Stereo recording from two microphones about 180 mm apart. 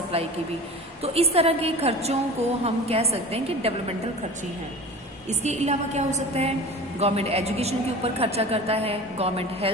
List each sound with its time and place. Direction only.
1.0 s a woman's voice: 35° right (ahead or behind)
5.3 s a woman's voice: 35° right (ahead or behind)